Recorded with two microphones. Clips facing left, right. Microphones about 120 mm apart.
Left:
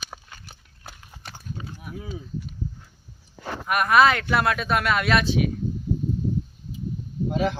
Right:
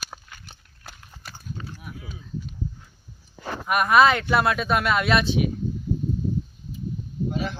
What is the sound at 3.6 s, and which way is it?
Speech, 20° right (ahead or behind).